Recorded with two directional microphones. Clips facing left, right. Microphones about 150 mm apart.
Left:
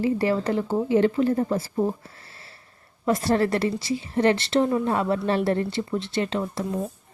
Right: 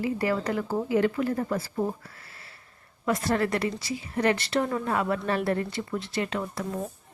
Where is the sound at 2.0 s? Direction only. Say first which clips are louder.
Left 2 dB; 30° left (ahead or behind).